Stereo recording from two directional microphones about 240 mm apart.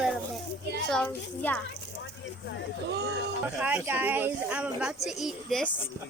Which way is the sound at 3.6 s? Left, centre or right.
Centre.